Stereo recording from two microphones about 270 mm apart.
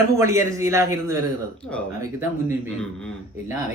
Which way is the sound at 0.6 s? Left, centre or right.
Centre.